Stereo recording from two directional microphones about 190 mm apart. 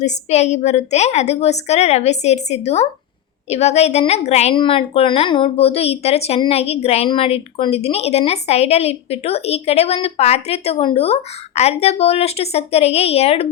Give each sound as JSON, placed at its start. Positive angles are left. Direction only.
{"t": 0.0, "sound": "a woman's voice", "side_deg": 35}